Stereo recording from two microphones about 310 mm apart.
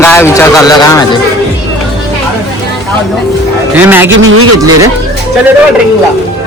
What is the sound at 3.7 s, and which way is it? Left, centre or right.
Speech, centre.